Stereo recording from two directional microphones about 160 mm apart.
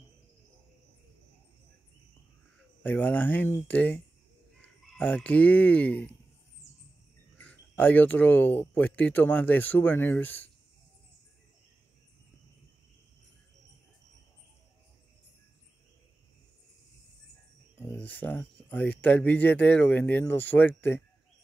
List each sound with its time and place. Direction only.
2.8 s speech: 10° left (ahead or behind)
7.3 s speech: 10° left (ahead or behind)
17.7 s speech: 10° left (ahead or behind)